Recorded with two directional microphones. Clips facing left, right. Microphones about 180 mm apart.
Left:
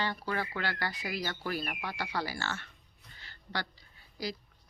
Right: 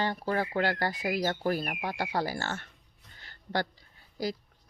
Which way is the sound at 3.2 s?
50° right (ahead or behind).